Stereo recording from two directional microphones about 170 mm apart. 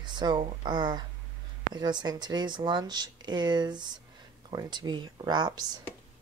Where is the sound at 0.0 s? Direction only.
25° right (ahead or behind).